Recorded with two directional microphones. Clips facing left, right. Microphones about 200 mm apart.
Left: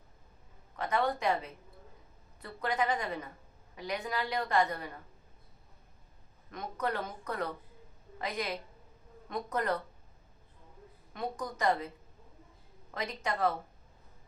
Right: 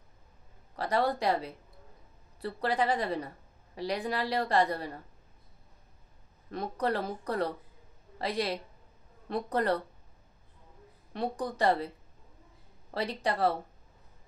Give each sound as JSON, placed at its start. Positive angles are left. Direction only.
{"t": 0.7, "sound": "a woman's voice", "side_deg": -35}
{"t": 6.5, "sound": "a woman's voice", "side_deg": -35}
{"t": 11.1, "sound": "a woman's voice", "side_deg": -35}
{"t": 12.9, "sound": "a woman's voice", "side_deg": -35}